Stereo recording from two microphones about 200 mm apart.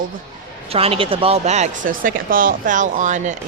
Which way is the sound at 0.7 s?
30° right (ahead or behind).